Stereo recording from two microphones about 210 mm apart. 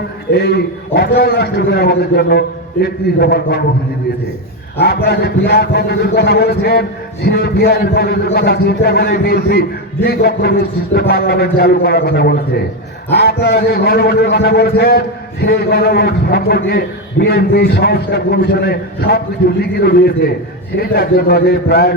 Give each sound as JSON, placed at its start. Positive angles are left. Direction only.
{"t": 0.3, "sound": "a man's voice", "side_deg": 50}
{"t": 4.8, "sound": "a man's voice", "side_deg": 50}